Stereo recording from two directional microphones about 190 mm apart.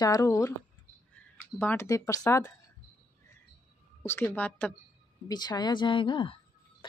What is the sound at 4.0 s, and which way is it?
Speech, 15° left (ahead or behind).